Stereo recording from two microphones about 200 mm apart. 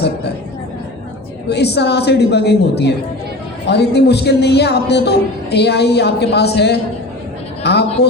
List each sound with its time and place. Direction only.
1.5 s a man's voice: 55° left (ahead or behind)